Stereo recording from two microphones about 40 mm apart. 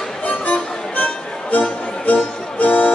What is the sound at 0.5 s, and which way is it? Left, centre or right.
Music, left.